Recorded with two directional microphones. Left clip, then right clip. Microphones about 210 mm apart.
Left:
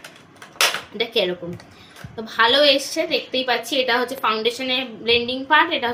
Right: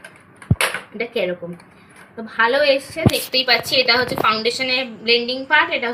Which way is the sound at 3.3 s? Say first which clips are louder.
Right 4 dB; 10° left (ahead or behind).